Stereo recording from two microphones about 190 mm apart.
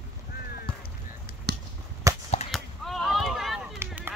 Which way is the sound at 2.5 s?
Centre (ahead or behind).